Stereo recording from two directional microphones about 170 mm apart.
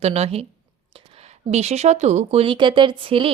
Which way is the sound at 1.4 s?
40° right (ahead or behind).